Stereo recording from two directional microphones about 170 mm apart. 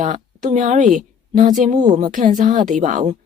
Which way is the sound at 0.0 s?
45° right (ahead or behind).